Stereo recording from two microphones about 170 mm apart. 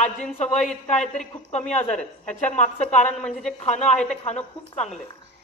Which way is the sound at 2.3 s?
45° left (ahead or behind).